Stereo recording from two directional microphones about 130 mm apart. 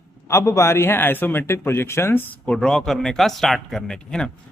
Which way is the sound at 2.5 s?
5° left (ahead or behind).